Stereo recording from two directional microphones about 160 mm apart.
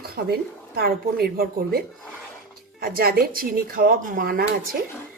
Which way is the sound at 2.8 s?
70° right (ahead or behind).